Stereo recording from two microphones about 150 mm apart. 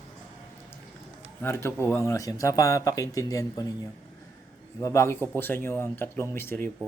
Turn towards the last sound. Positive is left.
turn(degrees=15)  # may be behind; listen again after turning